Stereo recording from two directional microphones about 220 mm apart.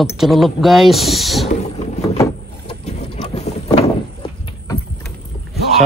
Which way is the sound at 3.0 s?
30° left (ahead or behind).